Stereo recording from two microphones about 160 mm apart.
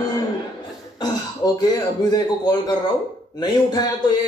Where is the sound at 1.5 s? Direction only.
25° left (ahead or behind).